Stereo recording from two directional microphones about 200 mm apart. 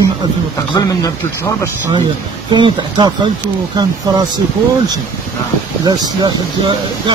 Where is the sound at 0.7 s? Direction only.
15° left (ahead or behind).